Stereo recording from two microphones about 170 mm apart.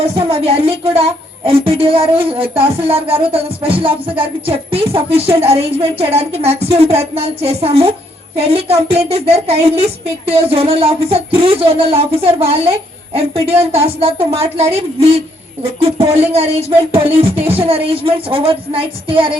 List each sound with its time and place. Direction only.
0.2 s a woman's voice: 35° right (ahead or behind)